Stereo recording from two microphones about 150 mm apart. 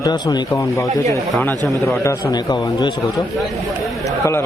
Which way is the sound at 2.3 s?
25° left (ahead or behind).